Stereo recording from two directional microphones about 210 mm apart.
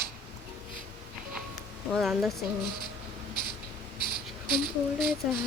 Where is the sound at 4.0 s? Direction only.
45° right (ahead or behind).